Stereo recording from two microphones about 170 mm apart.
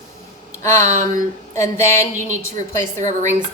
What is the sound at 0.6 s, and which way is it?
A woman's voice, 15° left (ahead or behind).